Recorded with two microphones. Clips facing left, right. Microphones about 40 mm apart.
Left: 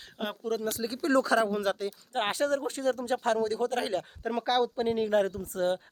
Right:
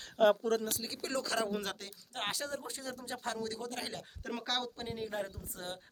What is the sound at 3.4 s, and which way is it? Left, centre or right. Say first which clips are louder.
Speech: left 11 dB; left.